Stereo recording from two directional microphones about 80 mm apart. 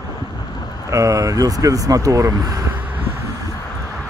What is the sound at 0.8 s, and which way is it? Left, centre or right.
Speech, right.